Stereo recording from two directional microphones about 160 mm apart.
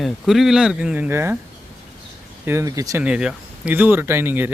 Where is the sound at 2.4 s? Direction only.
20° right (ahead or behind).